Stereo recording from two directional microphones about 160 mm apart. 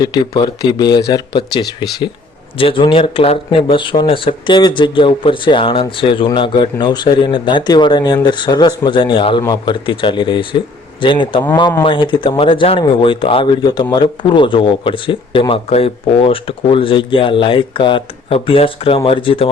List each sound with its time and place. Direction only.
0.0 s speech: 25° left (ahead or behind)